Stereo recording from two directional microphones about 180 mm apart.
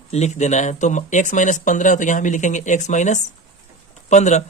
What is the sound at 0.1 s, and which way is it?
Speech, 40° left (ahead or behind).